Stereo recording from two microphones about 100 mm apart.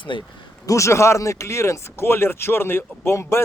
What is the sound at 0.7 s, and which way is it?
Speech, 30° left (ahead or behind).